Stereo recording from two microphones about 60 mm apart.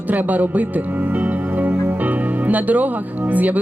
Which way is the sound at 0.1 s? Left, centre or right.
Right.